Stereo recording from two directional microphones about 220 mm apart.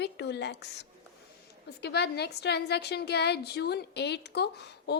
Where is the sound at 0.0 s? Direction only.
50° left (ahead or behind).